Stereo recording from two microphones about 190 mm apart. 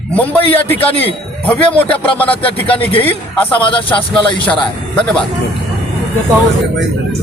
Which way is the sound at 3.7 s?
25° left (ahead or behind).